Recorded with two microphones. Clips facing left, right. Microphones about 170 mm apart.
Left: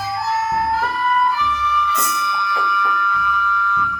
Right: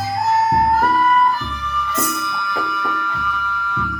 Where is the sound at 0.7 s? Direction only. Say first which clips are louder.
Right 4 dB; 45° right (ahead or behind).